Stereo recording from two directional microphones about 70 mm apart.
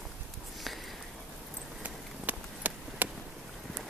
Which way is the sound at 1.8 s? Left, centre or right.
Right.